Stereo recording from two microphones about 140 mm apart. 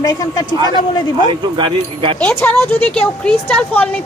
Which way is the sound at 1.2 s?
35° right (ahead or behind).